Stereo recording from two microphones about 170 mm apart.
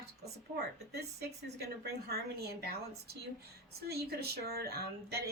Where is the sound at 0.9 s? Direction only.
70° right (ahead or behind).